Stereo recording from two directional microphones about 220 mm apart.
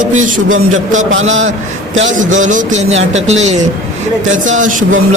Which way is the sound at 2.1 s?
35° right (ahead or behind).